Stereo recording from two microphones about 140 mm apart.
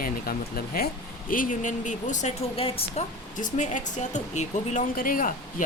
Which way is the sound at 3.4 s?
60° left (ahead or behind).